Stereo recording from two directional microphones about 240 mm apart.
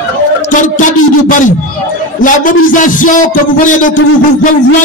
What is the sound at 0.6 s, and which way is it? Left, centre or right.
A man's voice, left.